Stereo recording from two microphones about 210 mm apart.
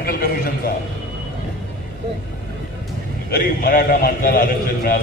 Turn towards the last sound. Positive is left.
turn(degrees=45)  # may be behind; listen again after turning